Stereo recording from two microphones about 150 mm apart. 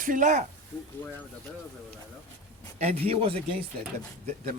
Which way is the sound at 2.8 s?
40° right (ahead or behind).